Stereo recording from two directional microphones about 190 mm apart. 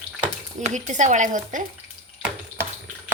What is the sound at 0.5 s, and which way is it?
Speech, 40° right (ahead or behind).